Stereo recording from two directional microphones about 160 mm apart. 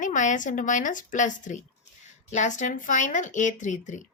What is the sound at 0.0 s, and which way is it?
Speech, 50° left (ahead or behind).